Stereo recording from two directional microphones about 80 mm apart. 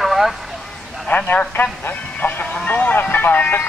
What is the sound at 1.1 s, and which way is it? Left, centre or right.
Speech, centre.